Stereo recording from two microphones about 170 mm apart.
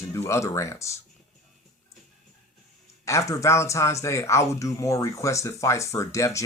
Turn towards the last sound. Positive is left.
turn(degrees=15)  # may be behind; listen again after turning